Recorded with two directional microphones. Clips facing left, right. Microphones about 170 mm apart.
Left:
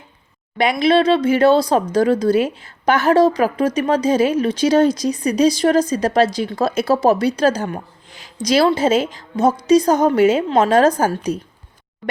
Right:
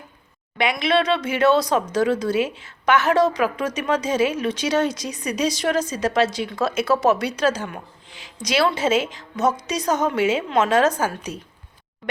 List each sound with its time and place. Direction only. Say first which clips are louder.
0.6 s speech: left 6 dB; 35° left (ahead or behind)